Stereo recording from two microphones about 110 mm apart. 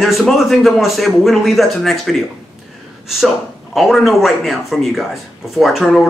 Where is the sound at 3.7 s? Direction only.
Centre (ahead or behind).